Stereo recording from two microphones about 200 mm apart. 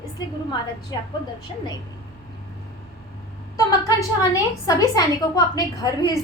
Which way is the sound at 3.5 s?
15° left (ahead or behind).